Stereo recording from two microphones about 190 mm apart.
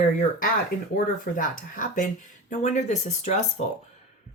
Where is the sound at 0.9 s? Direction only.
45° left (ahead or behind).